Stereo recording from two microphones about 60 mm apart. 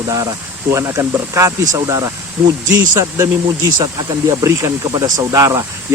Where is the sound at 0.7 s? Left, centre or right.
Right.